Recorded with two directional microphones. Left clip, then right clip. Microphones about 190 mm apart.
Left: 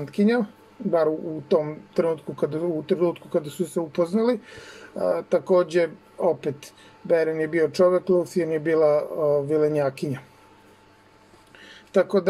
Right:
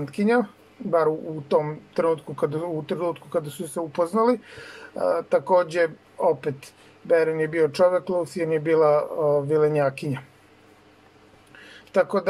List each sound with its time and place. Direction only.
0.1 s speech: 25° left (ahead or behind)
7.1 s speech: 25° left (ahead or behind)
11.9 s speech: 25° left (ahead or behind)